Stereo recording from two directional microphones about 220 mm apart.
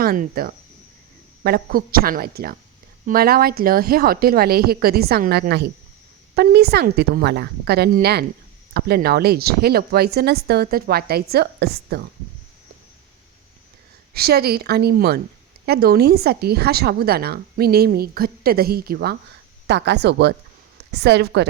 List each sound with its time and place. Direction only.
0.0 s speech: 40° right (ahead or behind)
14.1 s speech: 45° right (ahead or behind)